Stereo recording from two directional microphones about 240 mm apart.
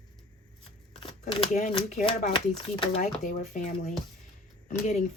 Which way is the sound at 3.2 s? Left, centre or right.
Left.